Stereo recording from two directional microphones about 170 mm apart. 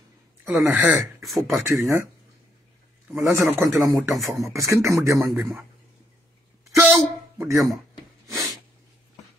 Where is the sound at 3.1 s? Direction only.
15° right (ahead or behind).